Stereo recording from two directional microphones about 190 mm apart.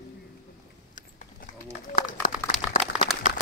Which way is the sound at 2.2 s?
45° left (ahead or behind).